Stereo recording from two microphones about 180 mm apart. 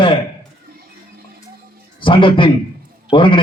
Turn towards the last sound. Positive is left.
turn(degrees=30)  # may be behind; listen again after turning